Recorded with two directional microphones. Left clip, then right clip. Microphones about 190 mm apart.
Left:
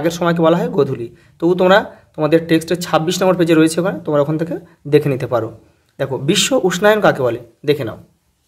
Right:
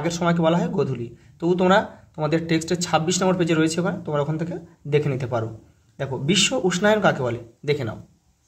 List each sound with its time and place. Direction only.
0.0 s speech: 25° left (ahead or behind)